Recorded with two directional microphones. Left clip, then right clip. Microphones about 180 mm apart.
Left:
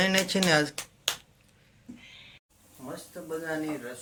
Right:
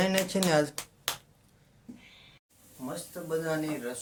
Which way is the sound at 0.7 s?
30° right (ahead or behind).